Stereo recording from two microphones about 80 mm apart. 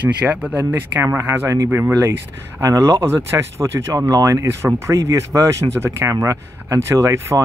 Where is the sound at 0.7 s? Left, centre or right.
Right.